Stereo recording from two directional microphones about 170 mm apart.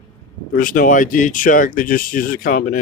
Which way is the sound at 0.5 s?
55° left (ahead or behind).